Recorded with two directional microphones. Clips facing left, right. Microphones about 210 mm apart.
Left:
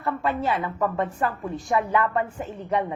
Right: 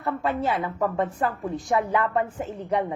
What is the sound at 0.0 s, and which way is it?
A woman's voice, 20° right (ahead or behind).